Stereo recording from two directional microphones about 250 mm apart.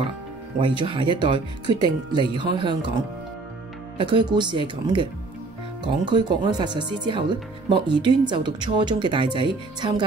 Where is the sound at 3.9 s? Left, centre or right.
Centre.